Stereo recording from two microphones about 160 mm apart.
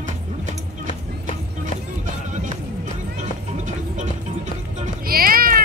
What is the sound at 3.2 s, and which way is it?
Music, 50° right (ahead or behind).